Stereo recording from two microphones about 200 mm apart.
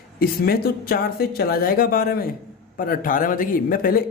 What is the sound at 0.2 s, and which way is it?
A man's voice, 50° left (ahead or behind).